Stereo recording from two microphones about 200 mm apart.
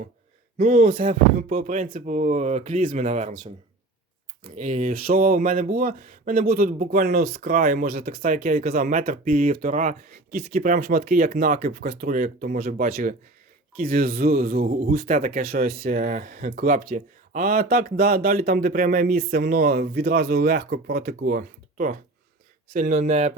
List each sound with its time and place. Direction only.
0.6 s speech: 35° right (ahead or behind)